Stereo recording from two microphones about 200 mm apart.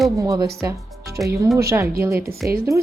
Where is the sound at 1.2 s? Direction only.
Centre (ahead or behind).